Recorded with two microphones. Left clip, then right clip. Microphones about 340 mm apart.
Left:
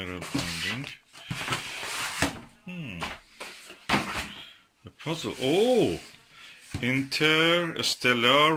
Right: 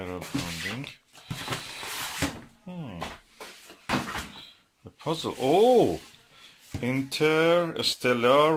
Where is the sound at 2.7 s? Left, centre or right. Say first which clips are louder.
Left 1 dB; centre.